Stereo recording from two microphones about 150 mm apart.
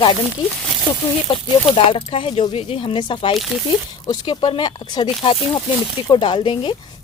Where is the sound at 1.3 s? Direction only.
30° left (ahead or behind).